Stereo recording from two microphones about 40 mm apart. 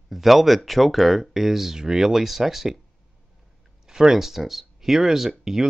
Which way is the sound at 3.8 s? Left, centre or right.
Centre.